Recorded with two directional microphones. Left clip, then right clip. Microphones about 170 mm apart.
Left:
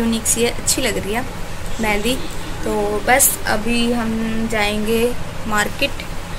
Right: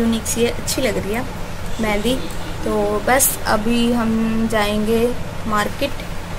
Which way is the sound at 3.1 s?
10° right (ahead or behind).